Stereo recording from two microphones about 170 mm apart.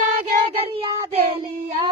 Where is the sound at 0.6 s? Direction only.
35° right (ahead or behind).